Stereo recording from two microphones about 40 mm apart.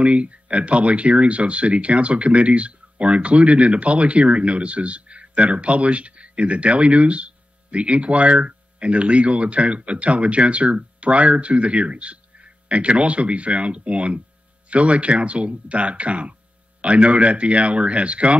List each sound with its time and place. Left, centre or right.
0.0 s speech: right